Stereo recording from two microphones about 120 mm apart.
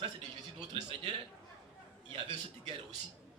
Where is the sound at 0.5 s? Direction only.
40° right (ahead or behind).